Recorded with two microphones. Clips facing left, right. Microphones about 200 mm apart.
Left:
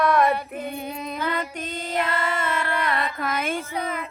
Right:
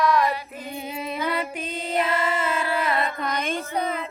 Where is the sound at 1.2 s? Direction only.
10° right (ahead or behind).